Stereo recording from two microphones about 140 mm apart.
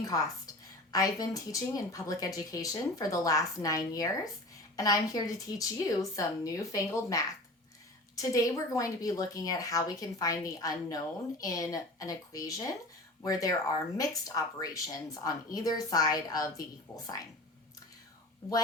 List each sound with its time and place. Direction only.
0.0 s a woman's voice: 25° left (ahead or behind)